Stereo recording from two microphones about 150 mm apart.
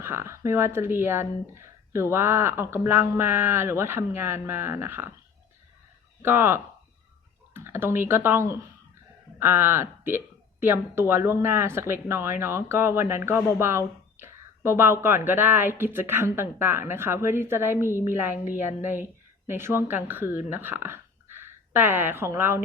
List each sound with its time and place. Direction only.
0.0 s speech: 15° right (ahead or behind)
6.2 s speech: 15° right (ahead or behind)